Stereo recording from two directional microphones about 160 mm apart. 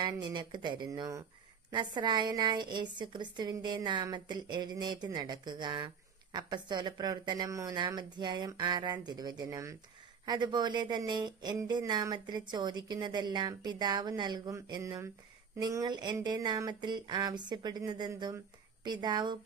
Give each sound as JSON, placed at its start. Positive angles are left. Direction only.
{"t": 0.0, "sound": "speech", "side_deg": -25}